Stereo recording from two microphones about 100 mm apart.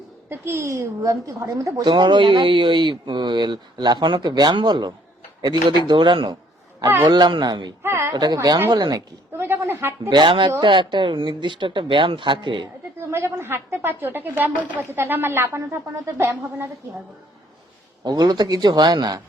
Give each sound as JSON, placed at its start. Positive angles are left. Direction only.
{"t": 0.3, "sound": "speech", "side_deg": -25}
{"t": 1.8, "sound": "speech", "side_deg": -50}
{"t": 7.8, "sound": "speech", "side_deg": -25}
{"t": 8.1, "sound": "speech", "side_deg": -45}
{"t": 9.4, "sound": "a sound", "side_deg": -25}
{"t": 10.1, "sound": "speech", "side_deg": -55}
{"t": 13.0, "sound": "a woman's voice", "side_deg": -25}
{"t": 18.0, "sound": "speech", "side_deg": -40}